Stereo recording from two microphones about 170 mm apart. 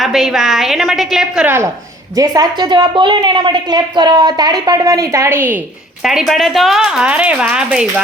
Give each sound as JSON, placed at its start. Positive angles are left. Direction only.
{"t": 0.0, "sound": "a woman's voice", "side_deg": 0}
{"t": 6.0, "sound": "speech", "side_deg": 0}